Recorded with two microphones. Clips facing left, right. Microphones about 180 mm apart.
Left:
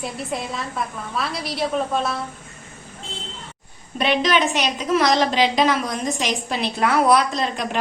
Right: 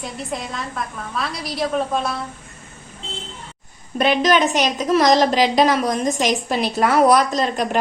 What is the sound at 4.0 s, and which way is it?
A woman's voice, 45° right (ahead or behind).